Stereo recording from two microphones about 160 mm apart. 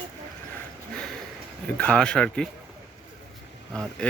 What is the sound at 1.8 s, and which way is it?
Speech, 5° left (ahead or behind).